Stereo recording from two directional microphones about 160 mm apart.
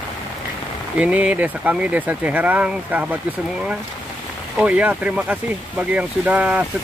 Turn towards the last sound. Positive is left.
turn(degrees=-10)  # may be behind; listen again after turning